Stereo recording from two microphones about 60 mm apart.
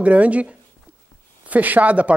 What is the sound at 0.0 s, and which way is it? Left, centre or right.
Speech, right.